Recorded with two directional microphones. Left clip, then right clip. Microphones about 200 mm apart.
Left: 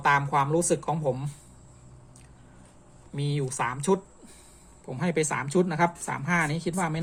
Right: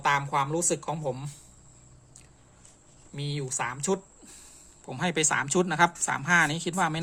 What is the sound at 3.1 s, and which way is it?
Speech, centre (ahead or behind).